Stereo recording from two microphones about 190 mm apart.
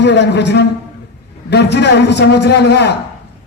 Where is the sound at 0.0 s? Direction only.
65° left (ahead or behind).